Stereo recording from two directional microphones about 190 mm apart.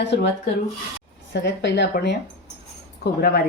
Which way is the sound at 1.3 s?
65° left (ahead or behind).